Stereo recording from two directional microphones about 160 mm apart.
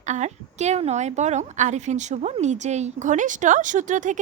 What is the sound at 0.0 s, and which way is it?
A woman's voice, 45° right (ahead or behind).